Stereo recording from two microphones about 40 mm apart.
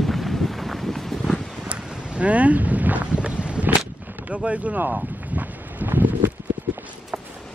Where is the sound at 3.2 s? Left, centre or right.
Right.